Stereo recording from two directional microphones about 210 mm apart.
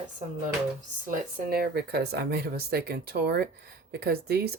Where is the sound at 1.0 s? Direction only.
40° right (ahead or behind).